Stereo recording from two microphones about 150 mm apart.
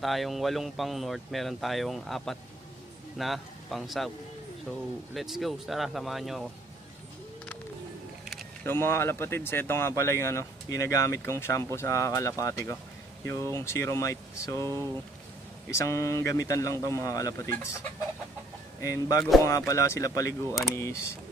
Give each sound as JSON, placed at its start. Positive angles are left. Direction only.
{"t": 0.0, "sound": "speech", "side_deg": 0}
{"t": 5.1, "sound": "speech", "side_deg": 0}
{"t": 8.6, "sound": "speech", "side_deg": 15}
{"t": 15.7, "sound": "speech", "side_deg": 20}